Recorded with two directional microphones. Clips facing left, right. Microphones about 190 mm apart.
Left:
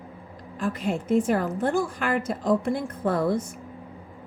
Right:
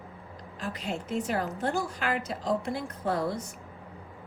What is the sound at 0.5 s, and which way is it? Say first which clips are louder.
A woman's voice: left 7 dB; 50° left (ahead or behind).